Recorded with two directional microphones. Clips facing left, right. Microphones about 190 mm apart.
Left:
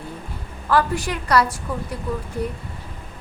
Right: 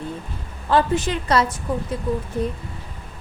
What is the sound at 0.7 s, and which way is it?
A woman's voice, 25° right (ahead or behind).